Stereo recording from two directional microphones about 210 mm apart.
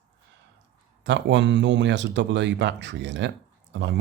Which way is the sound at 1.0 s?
60° right (ahead or behind).